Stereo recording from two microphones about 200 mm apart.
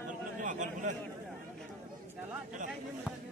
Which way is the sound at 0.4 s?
40° right (ahead or behind).